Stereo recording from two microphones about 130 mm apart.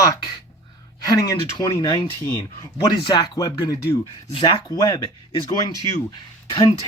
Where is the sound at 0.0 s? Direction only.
25° left (ahead or behind).